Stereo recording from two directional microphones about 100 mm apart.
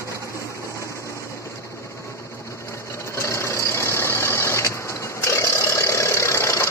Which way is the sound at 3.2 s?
30° left (ahead or behind).